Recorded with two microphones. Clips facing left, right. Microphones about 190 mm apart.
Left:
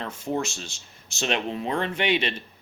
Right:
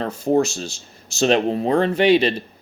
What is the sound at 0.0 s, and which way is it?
Speech, 35° right (ahead or behind).